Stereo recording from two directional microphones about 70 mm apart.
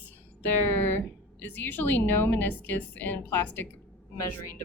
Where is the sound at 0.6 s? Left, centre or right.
Left.